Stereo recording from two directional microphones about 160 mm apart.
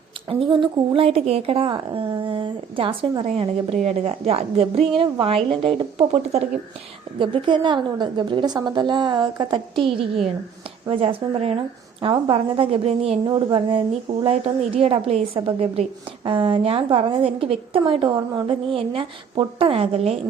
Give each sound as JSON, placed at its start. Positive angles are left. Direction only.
{"t": 0.3, "sound": "a woman's voice", "side_deg": -30}
{"t": 7.2, "sound": "a woman's voice", "side_deg": -30}